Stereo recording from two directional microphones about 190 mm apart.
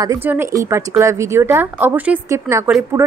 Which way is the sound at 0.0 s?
15° right (ahead or behind).